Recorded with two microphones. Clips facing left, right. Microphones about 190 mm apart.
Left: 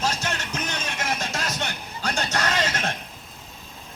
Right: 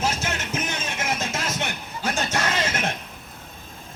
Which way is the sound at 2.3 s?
25° right (ahead or behind).